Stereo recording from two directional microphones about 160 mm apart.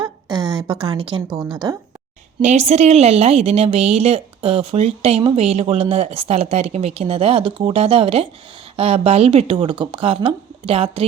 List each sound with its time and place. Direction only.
0.0 s a sound: 25° right (ahead or behind)
1.3 s speech: centre (ahead or behind)
2.4 s a woman's voice: 45° right (ahead or behind)